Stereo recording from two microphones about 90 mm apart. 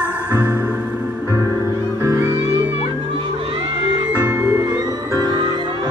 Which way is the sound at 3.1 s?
85° right.